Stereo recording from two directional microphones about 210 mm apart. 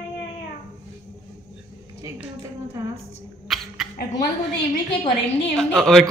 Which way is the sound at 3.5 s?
Centre (ahead or behind).